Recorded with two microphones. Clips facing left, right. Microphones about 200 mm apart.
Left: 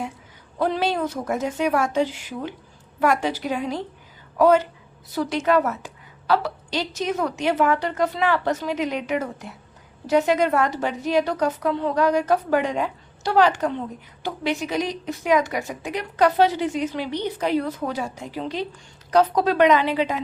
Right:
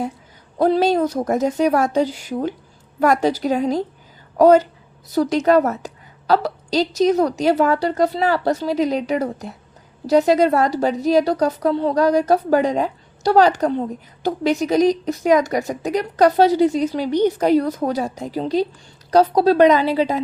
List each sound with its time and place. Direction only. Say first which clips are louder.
0.6 s a woman's voice: right 7 dB; 40° right (ahead or behind)